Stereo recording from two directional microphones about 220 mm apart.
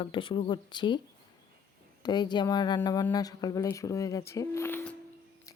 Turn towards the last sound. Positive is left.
turn(degrees=10)  # may be behind; listen again after turning